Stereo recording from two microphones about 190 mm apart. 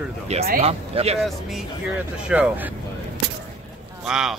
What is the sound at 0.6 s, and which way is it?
Speech, 30° right (ahead or behind).